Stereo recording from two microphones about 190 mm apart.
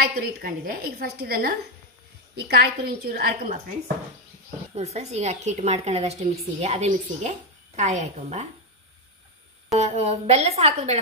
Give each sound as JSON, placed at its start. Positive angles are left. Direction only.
{"t": 0.0, "sound": "a woman's voice", "side_deg": -50}
{"t": 4.7, "sound": "a woman's voice", "side_deg": -35}
{"t": 9.8, "sound": "a woman's voice", "side_deg": -35}